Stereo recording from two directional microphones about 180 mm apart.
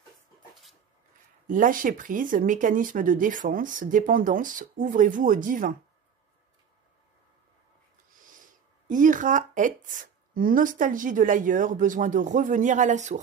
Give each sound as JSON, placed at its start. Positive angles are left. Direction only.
{"t": 1.5, "sound": "speech", "side_deg": -50}
{"t": 8.8, "sound": "speech", "side_deg": -45}